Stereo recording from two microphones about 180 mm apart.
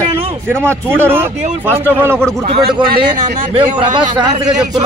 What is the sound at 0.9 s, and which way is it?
Speech, 10° right (ahead or behind).